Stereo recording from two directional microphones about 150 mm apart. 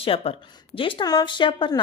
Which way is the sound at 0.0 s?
40° left (ahead or behind).